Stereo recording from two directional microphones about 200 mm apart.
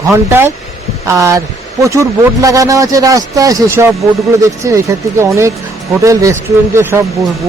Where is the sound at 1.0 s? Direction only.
15° right (ahead or behind).